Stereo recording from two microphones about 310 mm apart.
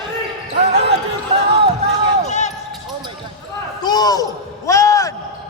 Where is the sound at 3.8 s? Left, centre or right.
Centre.